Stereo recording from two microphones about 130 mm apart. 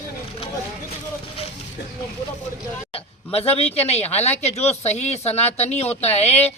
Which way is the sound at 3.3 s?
50° left (ahead or behind).